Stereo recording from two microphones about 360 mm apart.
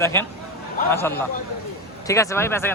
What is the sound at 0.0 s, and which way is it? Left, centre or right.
Speech, centre.